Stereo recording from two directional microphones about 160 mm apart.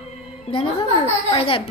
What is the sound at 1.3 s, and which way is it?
Speech, 35° left (ahead or behind).